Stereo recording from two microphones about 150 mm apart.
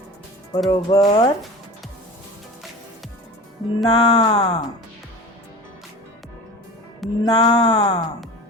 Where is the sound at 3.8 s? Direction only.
30° left (ahead or behind).